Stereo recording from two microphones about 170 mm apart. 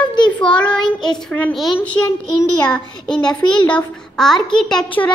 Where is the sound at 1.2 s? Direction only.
5° left (ahead or behind).